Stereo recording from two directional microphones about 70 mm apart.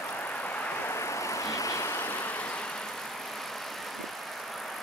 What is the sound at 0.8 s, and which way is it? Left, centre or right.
Vehicle, left.